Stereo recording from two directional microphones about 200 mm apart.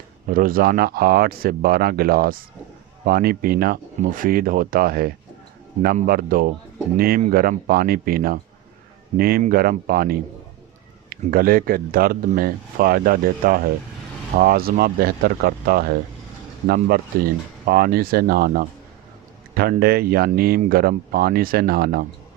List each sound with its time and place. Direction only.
0.3 s speech: 45° right (ahead or behind)